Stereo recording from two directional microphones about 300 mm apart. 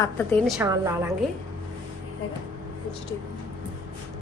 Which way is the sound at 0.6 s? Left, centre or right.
Centre.